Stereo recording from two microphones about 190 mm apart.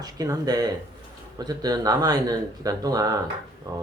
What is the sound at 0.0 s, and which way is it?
A man's voice, 20° right (ahead or behind).